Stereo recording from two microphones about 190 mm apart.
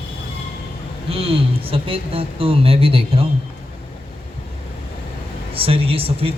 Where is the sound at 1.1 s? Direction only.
30° right (ahead or behind).